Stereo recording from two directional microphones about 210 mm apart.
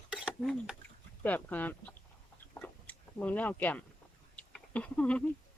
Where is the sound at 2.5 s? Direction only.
10° left (ahead or behind).